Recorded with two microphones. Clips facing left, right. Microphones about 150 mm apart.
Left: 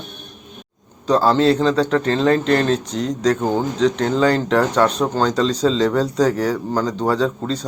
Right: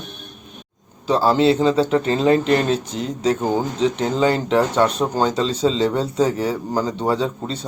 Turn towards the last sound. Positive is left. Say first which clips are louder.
# left 2 dB
turn(degrees=-5)  # may be behind; listen again after turning